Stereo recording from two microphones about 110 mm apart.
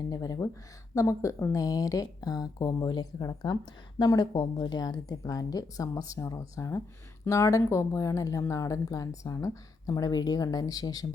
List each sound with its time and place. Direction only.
0.1 s speech: 35° left (ahead or behind)